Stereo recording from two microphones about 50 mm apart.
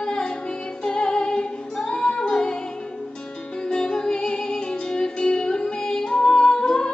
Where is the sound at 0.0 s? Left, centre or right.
Centre.